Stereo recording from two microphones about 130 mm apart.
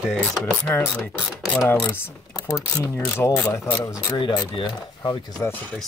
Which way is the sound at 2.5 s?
20° left (ahead or behind).